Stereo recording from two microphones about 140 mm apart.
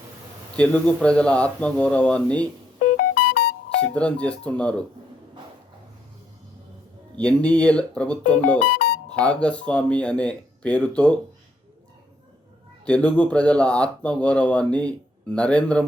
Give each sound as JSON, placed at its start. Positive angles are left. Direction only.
{"t": 0.5, "sound": "speech", "side_deg": 10}
{"t": 2.7, "sound": "music", "side_deg": 90}
{"t": 3.9, "sound": "speech", "side_deg": 10}
{"t": 7.2, "sound": "speech", "side_deg": 10}
{"t": 12.8, "sound": "speech", "side_deg": 10}